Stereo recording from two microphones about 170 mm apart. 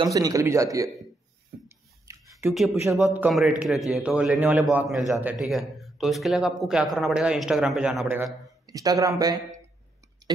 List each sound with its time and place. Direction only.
0.0 s a man's voice: 20° right (ahead or behind)
2.1 s a sound: 20° right (ahead or behind)
2.4 s a man's voice: centre (ahead or behind)
8.6 s a man's voice: 20° right (ahead or behind)